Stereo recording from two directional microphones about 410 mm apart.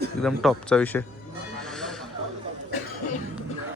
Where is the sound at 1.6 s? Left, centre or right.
Centre.